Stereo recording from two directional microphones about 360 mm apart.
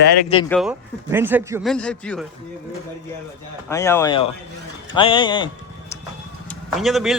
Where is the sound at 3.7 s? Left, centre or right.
Centre.